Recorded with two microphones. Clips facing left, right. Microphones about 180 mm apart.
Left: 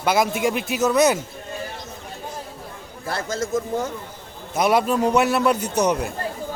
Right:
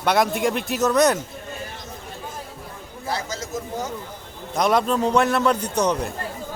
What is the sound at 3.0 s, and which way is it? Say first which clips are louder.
Speech: left 3 dB; 55° left (ahead or behind).